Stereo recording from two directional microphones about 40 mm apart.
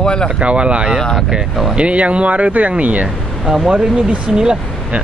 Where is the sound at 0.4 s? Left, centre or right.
Right.